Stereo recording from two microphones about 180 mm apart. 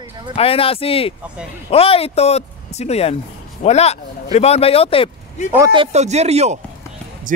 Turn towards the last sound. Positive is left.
turn(degrees=-35)  # may be behind; listen again after turning